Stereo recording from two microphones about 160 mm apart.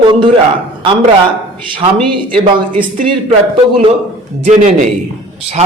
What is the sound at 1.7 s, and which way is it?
Speech, 30° right (ahead or behind).